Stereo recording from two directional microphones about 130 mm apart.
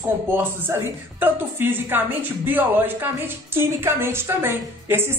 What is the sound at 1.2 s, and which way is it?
A woman's voice, 15° right (ahead or behind).